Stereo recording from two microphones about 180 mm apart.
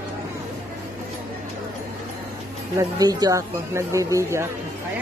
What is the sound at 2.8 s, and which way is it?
Speech, 20° right (ahead or behind).